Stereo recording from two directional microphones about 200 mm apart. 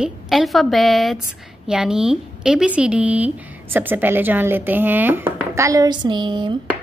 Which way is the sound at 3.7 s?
10° right (ahead or behind).